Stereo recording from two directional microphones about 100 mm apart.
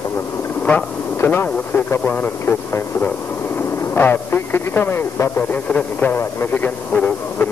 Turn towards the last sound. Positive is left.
turn(degrees=15)  # may be behind; listen again after turning